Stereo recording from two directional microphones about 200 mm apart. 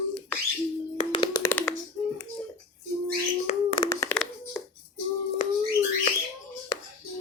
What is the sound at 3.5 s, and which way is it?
Hands, 25° left (ahead or behind).